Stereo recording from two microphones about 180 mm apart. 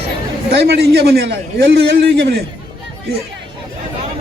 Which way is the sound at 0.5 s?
65° right (ahead or behind).